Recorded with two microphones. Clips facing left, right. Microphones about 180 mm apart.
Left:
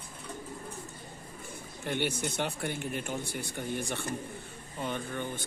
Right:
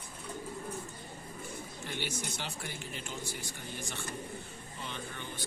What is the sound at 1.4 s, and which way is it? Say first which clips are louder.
Speech: left 4 dB; 55° left (ahead or behind).